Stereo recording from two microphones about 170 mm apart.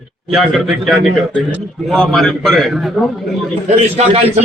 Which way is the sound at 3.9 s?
35° right (ahead or behind).